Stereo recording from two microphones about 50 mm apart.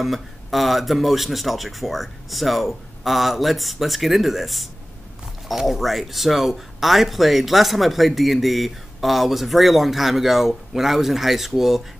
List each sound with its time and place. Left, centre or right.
0.0 s speech: centre